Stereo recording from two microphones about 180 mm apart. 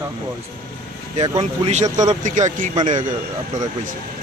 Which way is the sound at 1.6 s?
40° right (ahead or behind).